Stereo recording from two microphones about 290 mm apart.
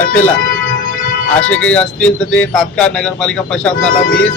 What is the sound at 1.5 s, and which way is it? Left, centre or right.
Speech, centre.